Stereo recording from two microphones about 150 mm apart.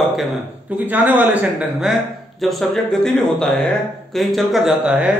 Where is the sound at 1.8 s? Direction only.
Centre (ahead or behind).